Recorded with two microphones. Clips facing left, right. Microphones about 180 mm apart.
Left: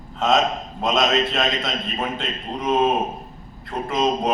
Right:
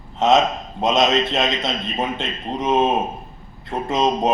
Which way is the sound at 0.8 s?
25° right (ahead or behind).